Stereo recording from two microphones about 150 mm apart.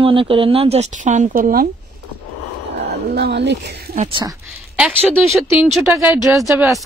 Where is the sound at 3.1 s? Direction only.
90° right.